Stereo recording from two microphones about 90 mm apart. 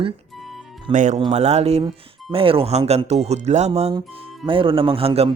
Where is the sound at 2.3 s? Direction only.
90° right.